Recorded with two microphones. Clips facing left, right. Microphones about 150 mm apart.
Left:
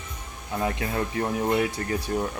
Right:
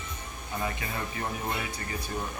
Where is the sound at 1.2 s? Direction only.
55° left (ahead or behind).